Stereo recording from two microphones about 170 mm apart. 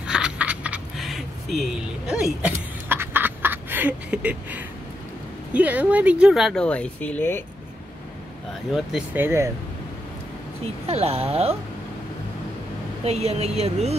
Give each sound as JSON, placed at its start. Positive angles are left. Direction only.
{"t": 0.0, "sound": "a sound", "side_deg": -5}
{"t": 5.5, "sound": "speech", "side_deg": -10}
{"t": 8.7, "sound": "speech", "side_deg": -5}
{"t": 10.6, "sound": "speech", "side_deg": -35}
{"t": 13.0, "sound": "speech", "side_deg": -40}